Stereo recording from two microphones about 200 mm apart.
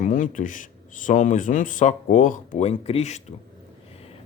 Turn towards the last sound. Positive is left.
turn(degrees=30)  # may be behind; listen again after turning